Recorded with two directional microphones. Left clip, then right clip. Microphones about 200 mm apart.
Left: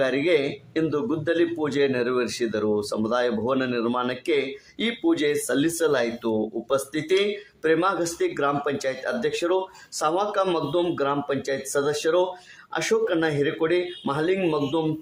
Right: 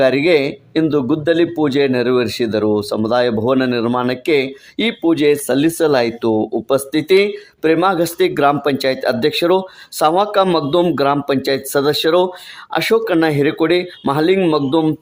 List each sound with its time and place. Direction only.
0.0 s speech: 35° right (ahead or behind)